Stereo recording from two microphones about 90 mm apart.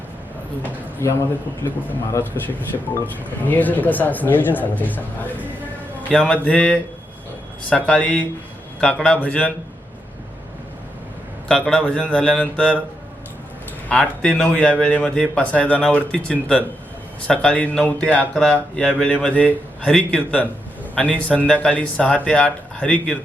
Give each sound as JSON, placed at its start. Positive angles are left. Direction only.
{"t": 1.0, "sound": "a man's voice", "side_deg": 35}
{"t": 1.6, "sound": "a man's voice", "side_deg": 20}
{"t": 11.7, "sound": "a man's voice", "side_deg": 10}
{"t": 13.8, "sound": "a man's voice", "side_deg": 15}